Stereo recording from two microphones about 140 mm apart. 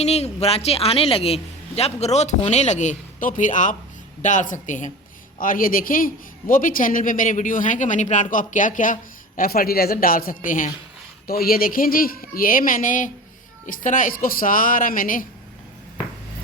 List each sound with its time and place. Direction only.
0.0 s a man's voice: 50° left (ahead or behind)
5.4 s a man's voice: 90° left
11.3 s a man's voice: 90° left